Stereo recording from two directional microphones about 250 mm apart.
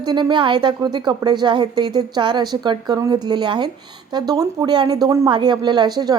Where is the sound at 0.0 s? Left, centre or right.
Centre.